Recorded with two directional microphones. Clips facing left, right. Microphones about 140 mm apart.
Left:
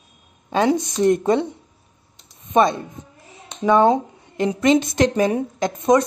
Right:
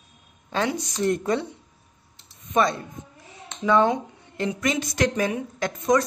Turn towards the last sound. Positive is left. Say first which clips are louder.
# left 5 dB
turn(degrees=20)  # may be behind; listen again after turning